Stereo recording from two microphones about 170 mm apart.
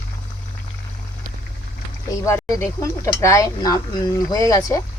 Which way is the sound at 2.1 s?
15° left (ahead or behind).